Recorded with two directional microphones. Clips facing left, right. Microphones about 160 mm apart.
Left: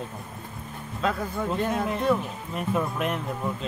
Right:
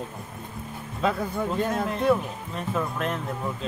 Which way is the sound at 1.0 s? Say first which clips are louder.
Right 2 dB; 5° right (ahead or behind).